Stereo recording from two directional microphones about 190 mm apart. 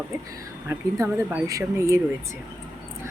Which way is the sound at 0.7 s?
10° right (ahead or behind).